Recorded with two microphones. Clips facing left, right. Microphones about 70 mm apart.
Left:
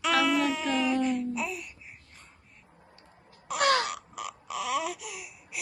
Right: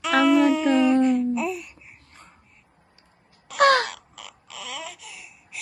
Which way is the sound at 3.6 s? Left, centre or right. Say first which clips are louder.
Right 7 dB; right.